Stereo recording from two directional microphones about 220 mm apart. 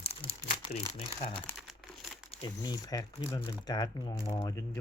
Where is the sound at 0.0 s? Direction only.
25° left (ahead or behind).